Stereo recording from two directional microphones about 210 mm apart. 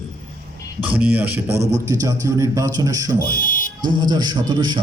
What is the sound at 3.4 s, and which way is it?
Buzzer, 40° left (ahead or behind).